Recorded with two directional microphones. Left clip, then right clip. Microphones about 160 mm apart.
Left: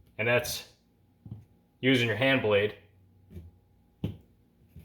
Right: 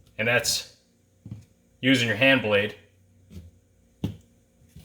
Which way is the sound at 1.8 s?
30° left (ahead or behind).